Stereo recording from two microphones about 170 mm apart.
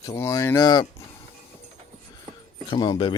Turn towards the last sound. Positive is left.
turn(degrees=25)  # may be behind; listen again after turning